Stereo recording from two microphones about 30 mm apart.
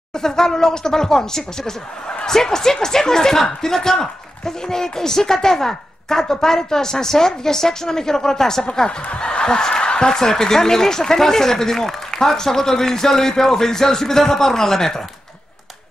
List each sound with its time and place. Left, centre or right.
0.1 s speech: centre
9.2 s speech: left; by 15.0 s centre